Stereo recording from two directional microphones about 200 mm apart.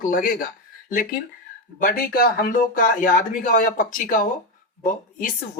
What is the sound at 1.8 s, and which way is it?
Speech, 45° left (ahead or behind).